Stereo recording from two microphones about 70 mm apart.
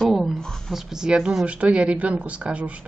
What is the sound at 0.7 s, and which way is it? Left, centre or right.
Speech, centre.